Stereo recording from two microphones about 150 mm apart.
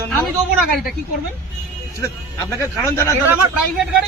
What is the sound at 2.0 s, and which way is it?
Speech, 20° left (ahead or behind).